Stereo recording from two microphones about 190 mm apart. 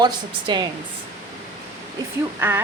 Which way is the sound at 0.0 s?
25° right (ahead or behind).